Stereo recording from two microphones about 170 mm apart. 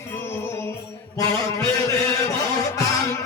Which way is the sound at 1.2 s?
20° left (ahead or behind).